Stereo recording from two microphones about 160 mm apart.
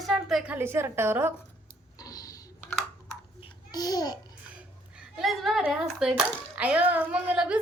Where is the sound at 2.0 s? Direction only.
25° left (ahead or behind).